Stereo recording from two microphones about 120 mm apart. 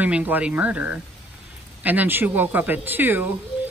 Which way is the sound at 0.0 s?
15° right (ahead or behind).